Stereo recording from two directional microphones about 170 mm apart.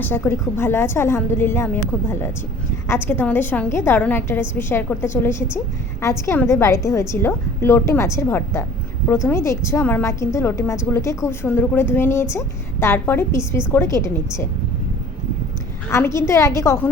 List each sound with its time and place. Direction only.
0.0 s a woman's voice: 15° left (ahead or behind)
15.9 s a woman's voice: 15° left (ahead or behind)